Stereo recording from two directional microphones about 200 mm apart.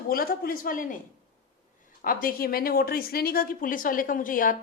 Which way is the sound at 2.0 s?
45° left (ahead or behind).